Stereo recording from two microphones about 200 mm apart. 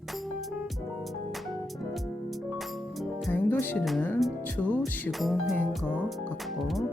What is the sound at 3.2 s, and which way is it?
Music, 10° left (ahead or behind).